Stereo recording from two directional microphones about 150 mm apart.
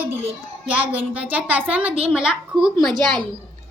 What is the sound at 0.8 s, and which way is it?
A woman's voice, 10° right (ahead or behind).